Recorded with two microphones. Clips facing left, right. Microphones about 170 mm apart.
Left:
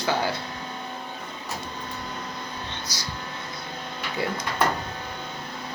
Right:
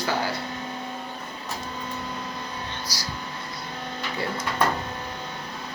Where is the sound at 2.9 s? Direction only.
20° left (ahead or behind).